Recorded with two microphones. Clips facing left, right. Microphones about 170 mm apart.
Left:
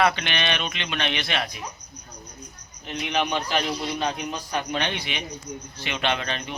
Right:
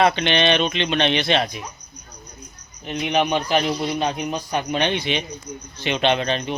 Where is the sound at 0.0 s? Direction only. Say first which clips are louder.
Right 5 dB; 25° right (ahead or behind).